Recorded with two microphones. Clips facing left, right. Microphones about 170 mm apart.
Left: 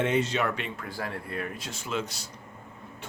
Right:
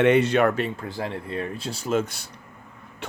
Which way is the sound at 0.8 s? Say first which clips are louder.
Right 5 dB; 25° right (ahead or behind).